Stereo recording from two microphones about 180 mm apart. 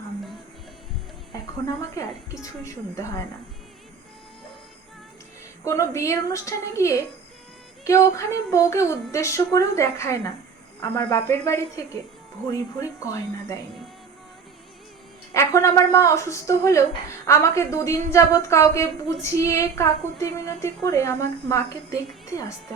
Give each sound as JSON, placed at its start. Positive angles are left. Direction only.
{"t": 1.6, "sound": "a woman's voice", "side_deg": 20}
{"t": 5.6, "sound": "a woman's voice", "side_deg": 15}
{"t": 15.3, "sound": "a woman's voice", "side_deg": 15}